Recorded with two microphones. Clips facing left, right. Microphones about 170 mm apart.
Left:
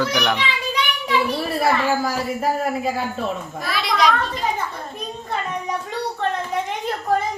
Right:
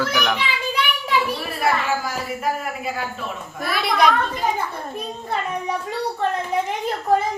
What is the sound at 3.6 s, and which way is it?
Speech, 55° right (ahead or behind).